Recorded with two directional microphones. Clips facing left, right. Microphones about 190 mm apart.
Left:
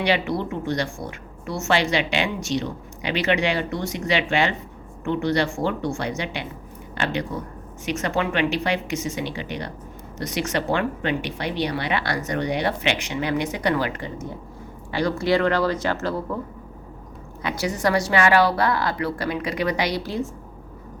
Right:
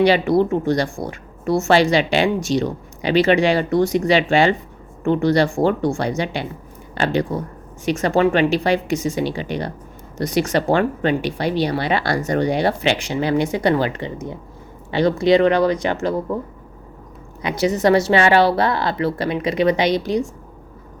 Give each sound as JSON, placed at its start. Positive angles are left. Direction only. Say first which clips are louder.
{"t": 0.0, "sound": "a woman's voice", "louder": "right 8 dB", "side_deg": -40}
{"t": 17.4, "sound": "a woman's voice", "louder": "right 6 dB", "side_deg": -20}